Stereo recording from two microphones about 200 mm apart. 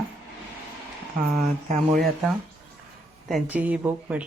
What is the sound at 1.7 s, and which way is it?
Speech, 45° right (ahead or behind).